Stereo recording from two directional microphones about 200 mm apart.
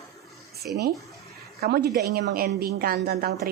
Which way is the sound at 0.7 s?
50° right (ahead or behind).